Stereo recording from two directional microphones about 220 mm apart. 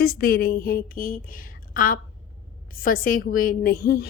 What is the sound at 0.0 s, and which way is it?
A woman's voice, 45° left (ahead or behind).